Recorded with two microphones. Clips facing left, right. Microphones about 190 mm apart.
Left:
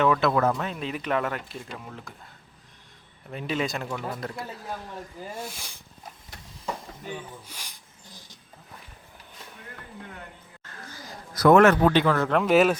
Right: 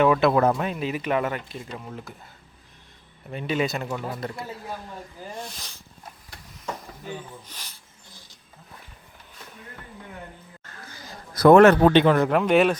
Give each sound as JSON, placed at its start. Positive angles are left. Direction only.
{"t": 0.0, "sound": "speech", "side_deg": -15}
{"t": 3.3, "sound": "speech", "side_deg": 0}
{"t": 5.3, "sound": "speech", "side_deg": 10}
{"t": 7.4, "sound": "speech", "side_deg": 10}
{"t": 11.0, "sound": "a man's voice", "side_deg": -30}
{"t": 12.4, "sound": "speech", "side_deg": 0}